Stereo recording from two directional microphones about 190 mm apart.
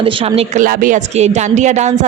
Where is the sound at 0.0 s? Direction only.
30° right (ahead or behind).